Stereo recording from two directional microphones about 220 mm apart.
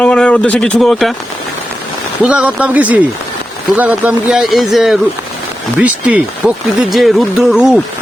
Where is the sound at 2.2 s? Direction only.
5° right (ahead or behind).